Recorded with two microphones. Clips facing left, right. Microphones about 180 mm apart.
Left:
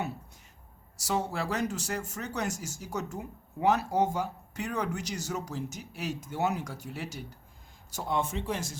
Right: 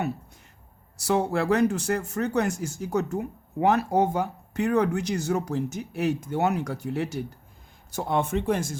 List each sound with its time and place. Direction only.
0.9 s speech: 60° right (ahead or behind)